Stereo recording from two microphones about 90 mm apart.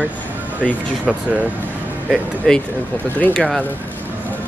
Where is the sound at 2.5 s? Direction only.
10° left (ahead or behind).